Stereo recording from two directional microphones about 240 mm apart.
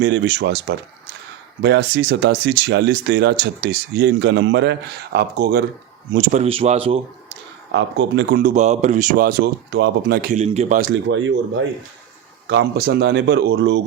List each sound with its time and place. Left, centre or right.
0.0 s speech: right
6.3 s speech: right
7.7 s speech: right
12.5 s speech: right